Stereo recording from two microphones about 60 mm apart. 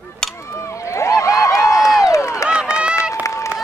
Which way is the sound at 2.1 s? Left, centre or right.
Left.